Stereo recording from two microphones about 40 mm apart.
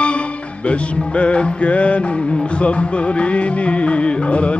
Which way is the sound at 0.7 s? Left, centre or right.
Left.